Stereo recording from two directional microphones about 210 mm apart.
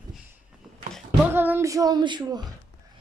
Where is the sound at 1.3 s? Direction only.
10° right (ahead or behind).